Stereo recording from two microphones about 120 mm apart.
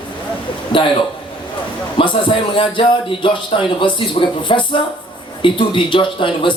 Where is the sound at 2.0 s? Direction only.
45° left (ahead or behind).